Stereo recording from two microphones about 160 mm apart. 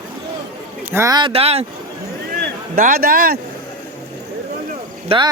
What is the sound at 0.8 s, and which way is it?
Speech, 15° right (ahead or behind).